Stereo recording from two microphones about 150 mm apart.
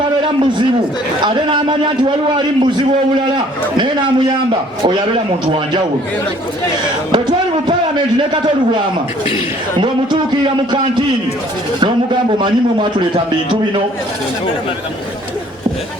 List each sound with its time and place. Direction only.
1.2 s speech: 30° right (ahead or behind)
7.1 s speech: 30° right (ahead or behind)
12.4 s speech: 30° right (ahead or behind)